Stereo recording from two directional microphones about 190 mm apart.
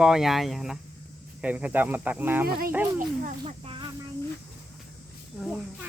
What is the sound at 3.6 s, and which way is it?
Speech, 30° right (ahead or behind).